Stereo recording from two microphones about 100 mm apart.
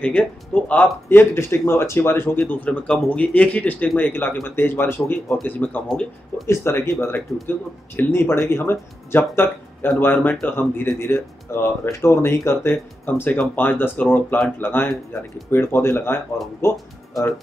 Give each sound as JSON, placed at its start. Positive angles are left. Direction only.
{"t": 0.0, "sound": "speech", "side_deg": 10}
{"t": 1.0, "sound": "speech", "side_deg": 25}
{"t": 6.4, "sound": "speech", "side_deg": 25}